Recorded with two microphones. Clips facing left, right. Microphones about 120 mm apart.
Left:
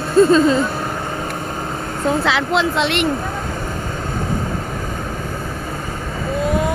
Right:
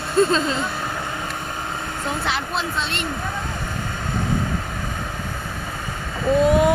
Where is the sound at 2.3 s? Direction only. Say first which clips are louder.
Left 7 dB; 90° left.